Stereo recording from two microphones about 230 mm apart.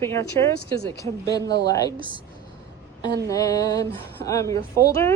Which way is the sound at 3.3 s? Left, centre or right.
Centre.